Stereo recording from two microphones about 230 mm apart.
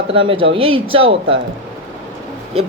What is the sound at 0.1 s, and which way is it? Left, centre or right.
Speech, right.